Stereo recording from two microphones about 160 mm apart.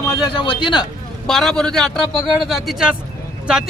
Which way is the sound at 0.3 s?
30° left (ahead or behind).